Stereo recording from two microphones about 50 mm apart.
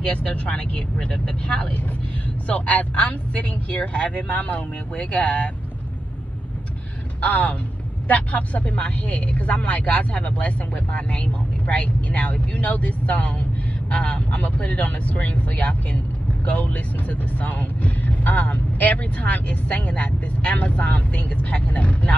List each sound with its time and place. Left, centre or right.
0.0 s speech: left
7.2 s speech: left